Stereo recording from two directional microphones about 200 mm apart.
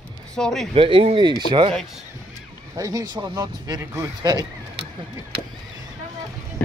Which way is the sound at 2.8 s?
20° right (ahead or behind).